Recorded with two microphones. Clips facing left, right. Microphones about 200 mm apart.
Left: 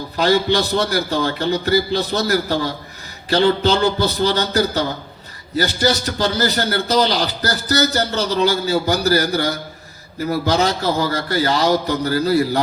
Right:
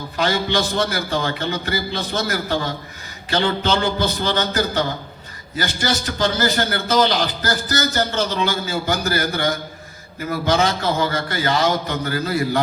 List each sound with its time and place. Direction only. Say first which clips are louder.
0.2 s a man's voice: left 4 dB; 40° left (ahead or behind)